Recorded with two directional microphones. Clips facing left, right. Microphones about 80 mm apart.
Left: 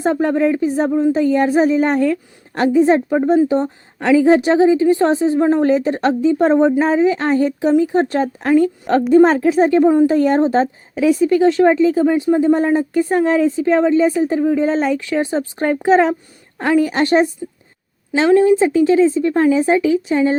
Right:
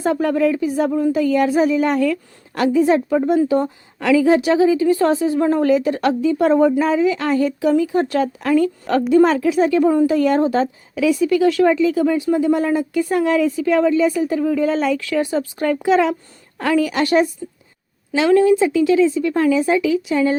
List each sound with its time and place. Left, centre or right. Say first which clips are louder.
0.0 s a woman's voice: left 1 dB; left
0.9 s a woman's voice: left 4 dB; centre
1.1 s a woman's voice: left 2 dB; left